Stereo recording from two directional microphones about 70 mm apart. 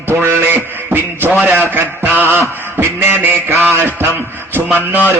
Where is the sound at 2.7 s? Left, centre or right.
Right.